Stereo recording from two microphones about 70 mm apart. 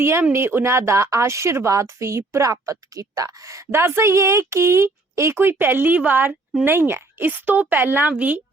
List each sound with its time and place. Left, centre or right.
0.0 s a woman's voice: right
3.7 s a woman's voice: right